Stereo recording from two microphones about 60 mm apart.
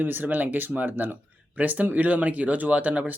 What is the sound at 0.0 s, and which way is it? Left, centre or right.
Speech, right.